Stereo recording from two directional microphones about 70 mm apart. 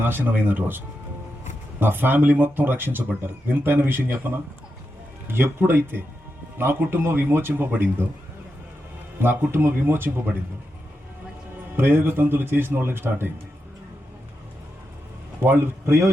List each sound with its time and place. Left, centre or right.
0.0 s speech: right
1.8 s speech: right
5.3 s speech: right
9.1 s speech: right
11.8 s speech: right
15.4 s speech: right